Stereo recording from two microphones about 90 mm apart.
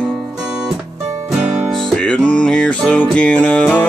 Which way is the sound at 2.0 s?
10° left (ahead or behind).